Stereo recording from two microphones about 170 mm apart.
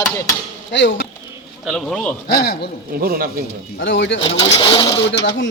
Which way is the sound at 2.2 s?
65° left (ahead or behind).